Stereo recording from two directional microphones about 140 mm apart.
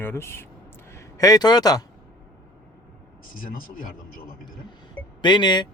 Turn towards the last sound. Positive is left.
turn(degrees=30)  # may be behind; listen again after turning